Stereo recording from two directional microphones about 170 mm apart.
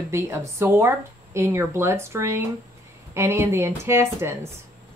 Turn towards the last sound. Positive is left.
turn(degrees=-15)  # may be behind; listen again after turning